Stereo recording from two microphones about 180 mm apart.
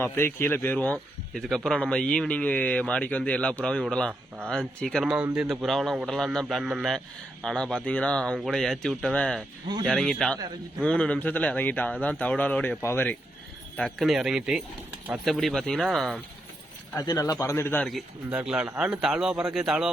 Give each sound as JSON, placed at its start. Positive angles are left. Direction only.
{"t": 0.0, "sound": "a man's voice", "side_deg": 15}
{"t": 5.0, "sound": "a man's voice", "side_deg": -5}
{"t": 13.7, "sound": "a man's voice", "side_deg": 0}
{"t": 16.9, "sound": "speech", "side_deg": 20}
{"t": 17.8, "sound": "a man's voice", "side_deg": -5}